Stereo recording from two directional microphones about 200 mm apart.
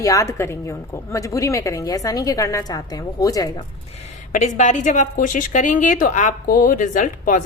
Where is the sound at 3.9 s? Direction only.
40° left (ahead or behind).